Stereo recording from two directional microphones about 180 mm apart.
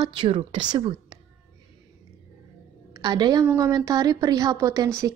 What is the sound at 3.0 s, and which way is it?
Speech, 25° right (ahead or behind).